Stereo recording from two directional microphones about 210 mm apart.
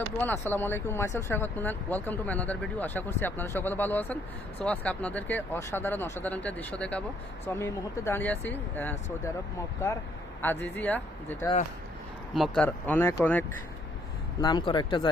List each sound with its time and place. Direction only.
0.2 s speech: 10° left (ahead or behind)
10.4 s speech: 10° left (ahead or behind)
14.4 s speech: 20° left (ahead or behind)